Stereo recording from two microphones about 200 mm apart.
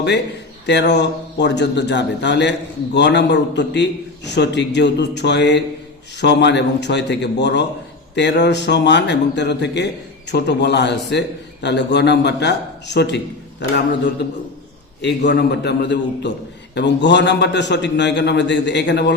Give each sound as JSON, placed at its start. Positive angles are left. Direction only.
{"t": 0.7, "sound": "a man's voice", "side_deg": 60}
{"t": 15.0, "sound": "a man's voice", "side_deg": 60}